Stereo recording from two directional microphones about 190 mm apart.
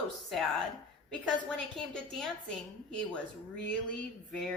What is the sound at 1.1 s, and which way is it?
A woman's voice, 5° left (ahead or behind).